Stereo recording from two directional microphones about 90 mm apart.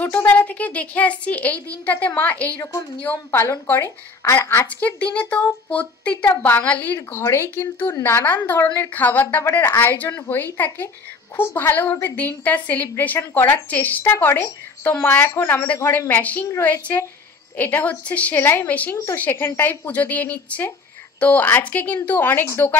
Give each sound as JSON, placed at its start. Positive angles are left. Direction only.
{"t": 0.0, "sound": "a woman's voice", "side_deg": 15}
{"t": 4.6, "sound": "speech", "side_deg": 15}
{"t": 7.0, "sound": "a woman's voice", "side_deg": 30}
{"t": 17.6, "sound": "a woman's voice", "side_deg": 20}